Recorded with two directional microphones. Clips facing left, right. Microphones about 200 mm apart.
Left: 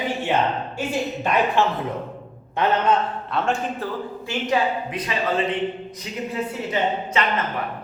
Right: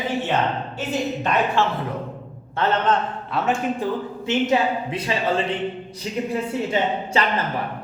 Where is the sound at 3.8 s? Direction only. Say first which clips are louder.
Right 3 dB; 20° right (ahead or behind).